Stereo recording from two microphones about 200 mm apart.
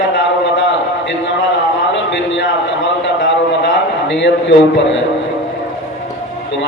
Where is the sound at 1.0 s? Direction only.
65° left (ahead or behind).